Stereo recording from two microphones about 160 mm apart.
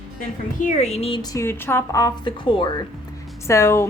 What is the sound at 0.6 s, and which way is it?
Speech, 45° left (ahead or behind).